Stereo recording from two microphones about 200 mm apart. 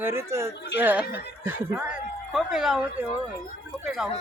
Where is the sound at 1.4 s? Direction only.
10° right (ahead or behind).